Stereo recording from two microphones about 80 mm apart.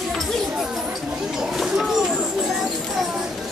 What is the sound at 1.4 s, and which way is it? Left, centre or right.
Speech, centre.